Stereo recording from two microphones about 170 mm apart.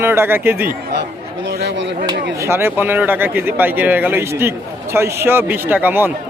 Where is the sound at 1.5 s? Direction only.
70° right (ahead or behind).